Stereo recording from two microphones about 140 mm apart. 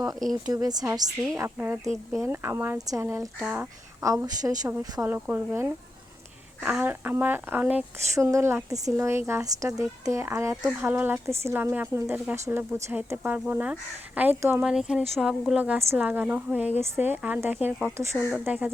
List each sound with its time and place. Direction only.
0.2 s speech: centre (ahead or behind)
0.5 s speech: 25° right (ahead or behind)
1.4 s speech: 15° right (ahead or behind)
4.0 s speech: 25° right (ahead or behind)